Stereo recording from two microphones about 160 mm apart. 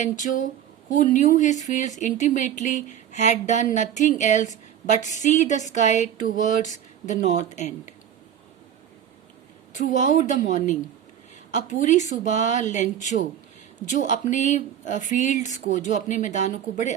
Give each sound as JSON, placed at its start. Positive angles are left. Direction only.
{"t": 0.0, "sound": "speech", "side_deg": 50}
{"t": 9.7, "sound": "speech", "side_deg": 50}